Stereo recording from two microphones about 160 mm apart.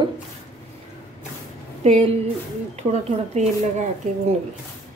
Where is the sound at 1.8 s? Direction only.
40° right (ahead or behind).